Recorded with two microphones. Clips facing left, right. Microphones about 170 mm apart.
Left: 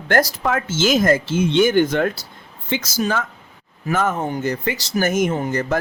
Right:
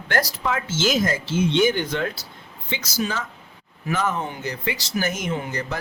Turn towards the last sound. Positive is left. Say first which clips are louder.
# left 6 dB
turn(degrees=50)  # may be behind; listen again after turning